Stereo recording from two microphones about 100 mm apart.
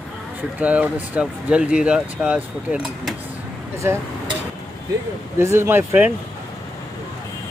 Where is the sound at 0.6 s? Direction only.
15° right (ahead or behind).